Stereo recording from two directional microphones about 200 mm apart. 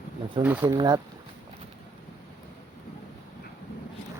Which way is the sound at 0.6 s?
20° right (ahead or behind).